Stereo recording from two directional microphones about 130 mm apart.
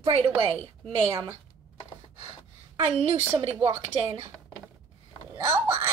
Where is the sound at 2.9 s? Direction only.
50° right (ahead or behind).